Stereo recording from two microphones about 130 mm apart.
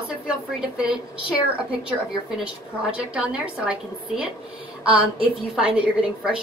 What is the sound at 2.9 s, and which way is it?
A woman's voice, 10° right (ahead or behind).